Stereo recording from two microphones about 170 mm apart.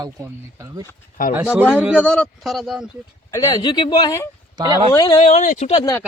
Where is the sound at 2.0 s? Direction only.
5° left (ahead or behind).